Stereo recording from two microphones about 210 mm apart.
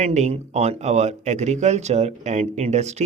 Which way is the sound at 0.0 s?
35° right (ahead or behind).